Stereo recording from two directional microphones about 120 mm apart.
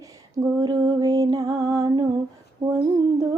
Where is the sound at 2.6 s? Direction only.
25° right (ahead or behind).